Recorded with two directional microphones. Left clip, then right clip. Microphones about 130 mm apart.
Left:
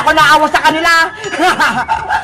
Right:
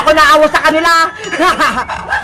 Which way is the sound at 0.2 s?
30° right (ahead or behind).